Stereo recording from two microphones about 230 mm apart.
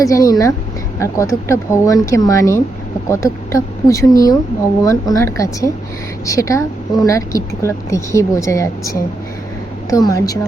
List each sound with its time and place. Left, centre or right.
0.0 s speech: centre